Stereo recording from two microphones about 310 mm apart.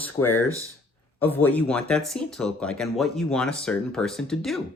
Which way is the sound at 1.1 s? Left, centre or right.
Centre.